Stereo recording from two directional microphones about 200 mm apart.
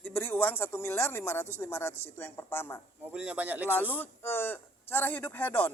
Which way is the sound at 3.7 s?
10° left (ahead or behind).